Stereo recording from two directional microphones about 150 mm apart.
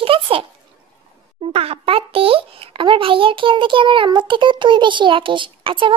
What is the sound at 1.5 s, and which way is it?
Child singing, 40° right (ahead or behind).